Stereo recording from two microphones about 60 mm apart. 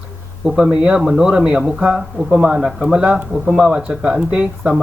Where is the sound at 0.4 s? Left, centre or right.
Centre.